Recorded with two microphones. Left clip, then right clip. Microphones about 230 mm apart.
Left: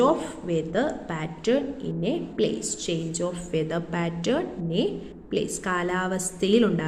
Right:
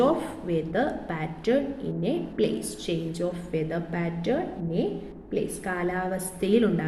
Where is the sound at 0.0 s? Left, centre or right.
Centre.